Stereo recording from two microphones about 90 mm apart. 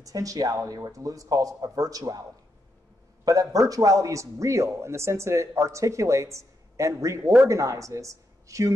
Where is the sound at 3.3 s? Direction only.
40° right (ahead or behind).